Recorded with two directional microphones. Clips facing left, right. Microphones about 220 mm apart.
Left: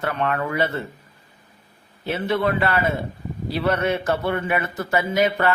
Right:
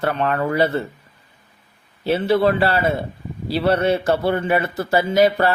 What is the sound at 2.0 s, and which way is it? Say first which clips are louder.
A man's voice: right 5 dB; 30° right (ahead or behind).